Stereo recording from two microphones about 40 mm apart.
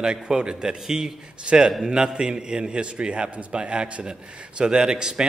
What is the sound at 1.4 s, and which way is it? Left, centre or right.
A man's voice, right.